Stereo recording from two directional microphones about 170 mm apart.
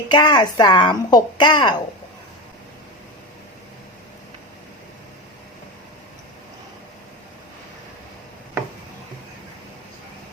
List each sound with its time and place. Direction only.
0.1 s speech: 25° left (ahead or behind)